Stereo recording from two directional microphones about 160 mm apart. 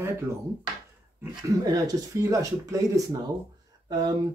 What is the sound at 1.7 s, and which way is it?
Speech, 20° right (ahead or behind).